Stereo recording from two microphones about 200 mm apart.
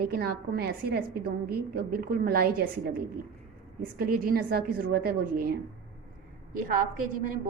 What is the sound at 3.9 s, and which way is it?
A woman's voice, 45° right (ahead or behind).